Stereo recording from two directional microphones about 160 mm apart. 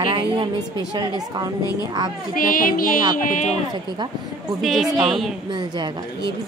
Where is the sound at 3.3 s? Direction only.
50° left (ahead or behind).